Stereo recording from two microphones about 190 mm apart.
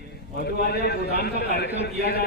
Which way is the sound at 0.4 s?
55° left (ahead or behind).